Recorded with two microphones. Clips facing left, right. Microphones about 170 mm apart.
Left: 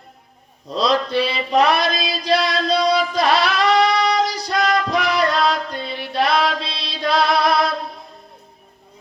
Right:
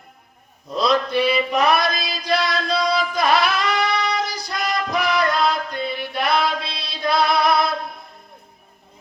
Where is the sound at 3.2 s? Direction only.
35° left (ahead or behind).